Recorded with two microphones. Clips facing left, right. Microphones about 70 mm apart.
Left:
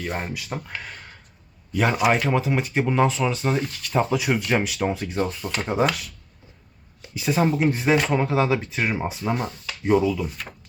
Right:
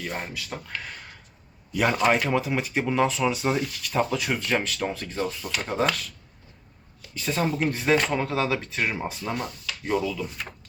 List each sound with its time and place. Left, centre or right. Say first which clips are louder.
0.0 s speech: left 3 dB; centre
0.8 s speech: left 1 dB; centre
4.0 s speech: left 4 dB; centre
9.3 s speech: left 4 dB; left